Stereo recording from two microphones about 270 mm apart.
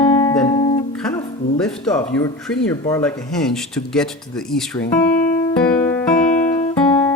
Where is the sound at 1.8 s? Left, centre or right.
Centre.